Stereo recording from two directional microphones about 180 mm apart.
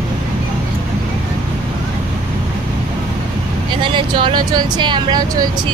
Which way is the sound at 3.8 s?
25° right (ahead or behind).